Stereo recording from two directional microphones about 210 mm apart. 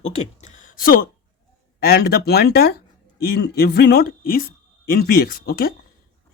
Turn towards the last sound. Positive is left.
turn(degrees=45)  # may be behind; listen again after turning